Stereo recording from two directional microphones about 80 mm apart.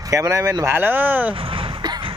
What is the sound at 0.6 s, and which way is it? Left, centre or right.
Speech, right.